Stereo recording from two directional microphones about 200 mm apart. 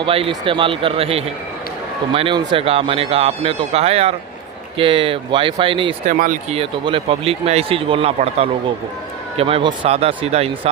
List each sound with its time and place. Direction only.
0.0 s speech: 25° right (ahead or behind)
6.1 s speech: 40° right (ahead or behind)
6.6 s speech: 25° right (ahead or behind)